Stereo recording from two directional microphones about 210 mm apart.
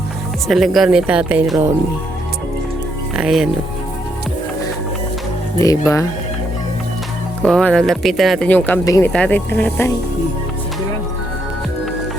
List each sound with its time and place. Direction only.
0.4 s speech: centre (ahead or behind)
3.2 s speech: 5° right (ahead or behind)
5.5 s speech: 15° left (ahead or behind)
7.4 s speech: 5° left (ahead or behind)